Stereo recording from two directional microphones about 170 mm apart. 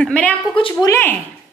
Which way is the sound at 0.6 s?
30° left (ahead or behind).